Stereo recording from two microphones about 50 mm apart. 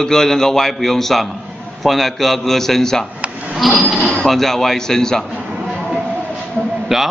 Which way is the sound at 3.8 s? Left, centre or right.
Centre.